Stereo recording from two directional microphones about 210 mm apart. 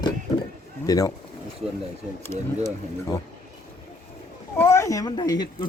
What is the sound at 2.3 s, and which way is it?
Speech, 35° right (ahead or behind).